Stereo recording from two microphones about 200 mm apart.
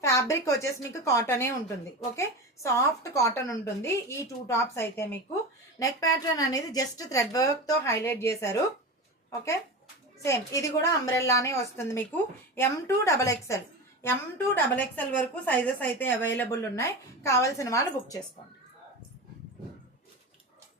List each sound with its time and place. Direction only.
0.0 s a woman's voice: 15° left (ahead or behind)
2.7 s a woman's voice: 15° left (ahead or behind)
10.2 s a woman's voice: 15° left (ahead or behind)